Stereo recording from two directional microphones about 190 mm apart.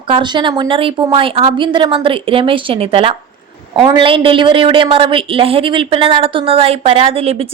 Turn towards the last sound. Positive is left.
turn(degrees=-30)  # may be behind; listen again after turning